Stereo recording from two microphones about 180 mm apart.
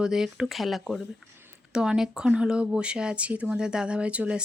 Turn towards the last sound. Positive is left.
turn(degrees=-5)  # may be behind; listen again after turning